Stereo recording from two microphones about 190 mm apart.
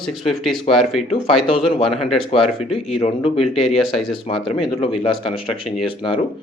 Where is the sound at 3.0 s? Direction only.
30° left (ahead or behind).